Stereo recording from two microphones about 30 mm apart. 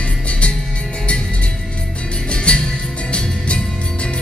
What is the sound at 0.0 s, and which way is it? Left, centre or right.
Music, left.